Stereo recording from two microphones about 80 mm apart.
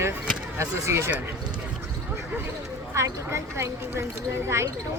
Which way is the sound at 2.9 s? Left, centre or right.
Right.